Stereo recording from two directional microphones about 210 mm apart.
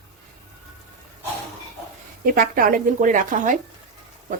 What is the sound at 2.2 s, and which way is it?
Speech, 45° right (ahead or behind).